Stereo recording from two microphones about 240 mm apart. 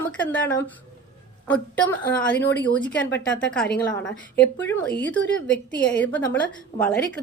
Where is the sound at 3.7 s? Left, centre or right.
Left.